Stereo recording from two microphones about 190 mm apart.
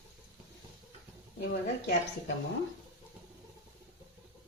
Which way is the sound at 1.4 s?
60° left (ahead or behind).